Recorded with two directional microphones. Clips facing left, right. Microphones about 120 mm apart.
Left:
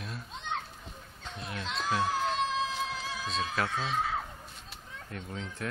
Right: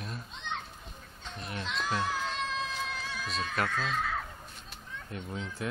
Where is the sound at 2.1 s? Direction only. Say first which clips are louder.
Left 4 dB; 30° left (ahead or behind).